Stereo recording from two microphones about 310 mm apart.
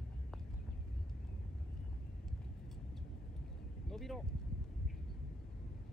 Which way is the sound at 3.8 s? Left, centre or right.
Centre.